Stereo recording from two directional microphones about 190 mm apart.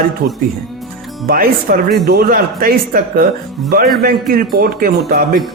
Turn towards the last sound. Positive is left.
turn(degrees=-50)  # may be behind; listen again after turning